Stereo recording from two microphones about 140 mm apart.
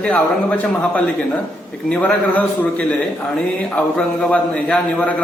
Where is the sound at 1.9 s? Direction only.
10° left (ahead or behind).